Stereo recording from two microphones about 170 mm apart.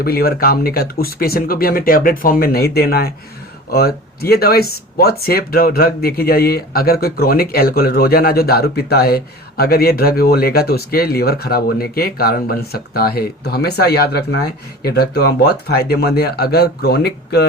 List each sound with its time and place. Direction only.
0.0 s speech: 65° left (ahead or behind)